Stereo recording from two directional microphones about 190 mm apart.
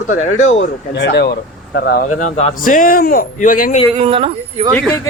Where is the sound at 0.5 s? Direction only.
70° left (ahead or behind).